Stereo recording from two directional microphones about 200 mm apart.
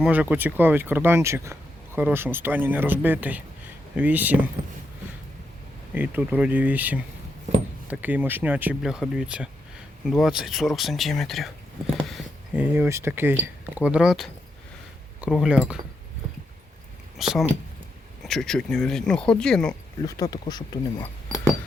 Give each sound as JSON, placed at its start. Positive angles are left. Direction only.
{"t": 0.0, "sound": "speech", "side_deg": -5}
{"t": 5.9, "sound": "speech", "side_deg": -10}
{"t": 11.9, "sound": "a sound", "side_deg": 0}
{"t": 12.7, "sound": "speech", "side_deg": -10}
{"t": 17.2, "sound": "speech", "side_deg": 0}
{"t": 20.1, "sound": "speech", "side_deg": 15}